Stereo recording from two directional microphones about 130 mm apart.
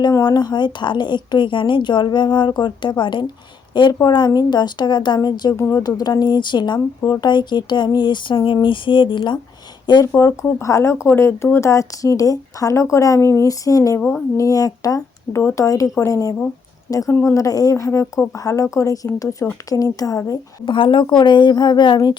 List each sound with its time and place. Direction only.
0.0 s a woman's voice: 30° left (ahead or behind)
5.5 s a woman's voice: 20° left (ahead or behind)
5.8 s a woman's voice: 30° left (ahead or behind)
10.1 s a woman's voice: 25° left (ahead or behind)
20.7 s a woman's voice: 40° left (ahead or behind)